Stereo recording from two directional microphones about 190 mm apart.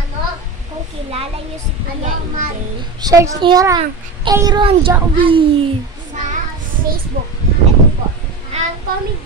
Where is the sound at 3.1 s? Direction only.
15° right (ahead or behind).